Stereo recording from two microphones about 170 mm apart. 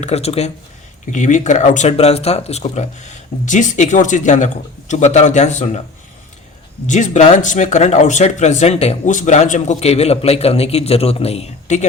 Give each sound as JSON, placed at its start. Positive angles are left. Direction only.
{"t": 0.0, "sound": "speech", "side_deg": 40}
{"t": 6.8, "sound": "speech", "side_deg": 45}